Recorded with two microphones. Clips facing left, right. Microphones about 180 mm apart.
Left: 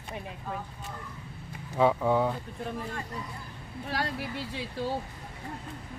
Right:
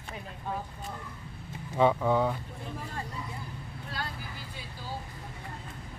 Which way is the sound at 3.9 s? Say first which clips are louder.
Left 7 dB; 80° left.